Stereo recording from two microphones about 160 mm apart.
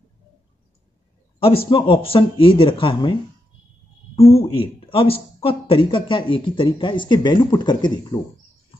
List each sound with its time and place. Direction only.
1.7 s speech: 35° left (ahead or behind)